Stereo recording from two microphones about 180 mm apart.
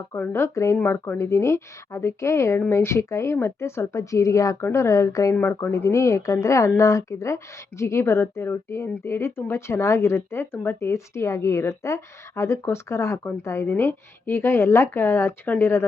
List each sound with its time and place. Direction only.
0.1 s speech: 15° left (ahead or behind)